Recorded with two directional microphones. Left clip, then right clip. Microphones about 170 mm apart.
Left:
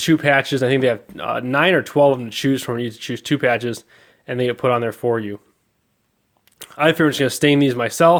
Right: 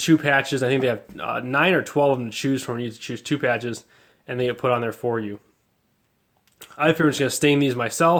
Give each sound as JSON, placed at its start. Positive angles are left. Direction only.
{"t": 0.0, "sound": "speech", "side_deg": 40}
{"t": 6.4, "sound": "speech", "side_deg": 50}